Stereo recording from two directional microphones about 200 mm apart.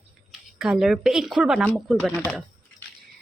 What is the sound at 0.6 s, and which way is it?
Speech, centre (ahead or behind).